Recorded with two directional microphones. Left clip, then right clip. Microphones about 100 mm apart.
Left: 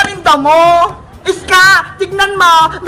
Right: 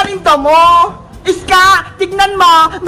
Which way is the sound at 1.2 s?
40° right (ahead or behind).